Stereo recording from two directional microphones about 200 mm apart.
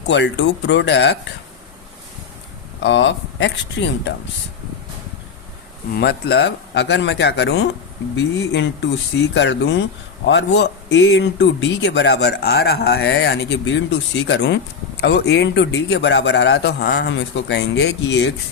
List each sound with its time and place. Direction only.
0.1 s a man's voice: 60° left (ahead or behind)
2.8 s a man's voice: 65° left (ahead or behind)
5.9 s a man's voice: 55° left (ahead or behind)